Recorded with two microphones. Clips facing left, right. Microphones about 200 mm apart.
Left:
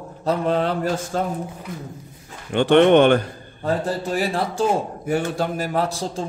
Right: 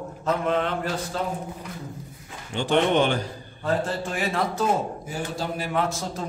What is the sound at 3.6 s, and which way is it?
A man's voice, 35° left (ahead or behind).